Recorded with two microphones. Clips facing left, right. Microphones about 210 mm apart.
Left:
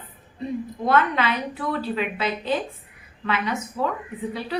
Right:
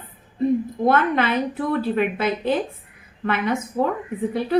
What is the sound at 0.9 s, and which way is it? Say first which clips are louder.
A woman's voice: right 2 dB; 50° right (ahead or behind).